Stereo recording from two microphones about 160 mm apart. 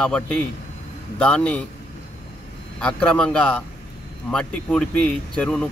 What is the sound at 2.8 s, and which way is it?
Speech, 5° left (ahead or behind).